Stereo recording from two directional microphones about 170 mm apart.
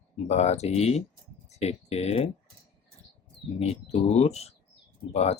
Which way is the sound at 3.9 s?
40° left (ahead or behind).